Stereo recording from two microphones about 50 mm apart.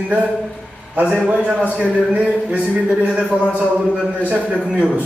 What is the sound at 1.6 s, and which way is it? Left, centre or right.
A man's voice, right.